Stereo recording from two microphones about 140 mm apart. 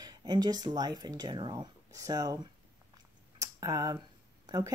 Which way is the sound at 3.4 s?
25° right (ahead or behind).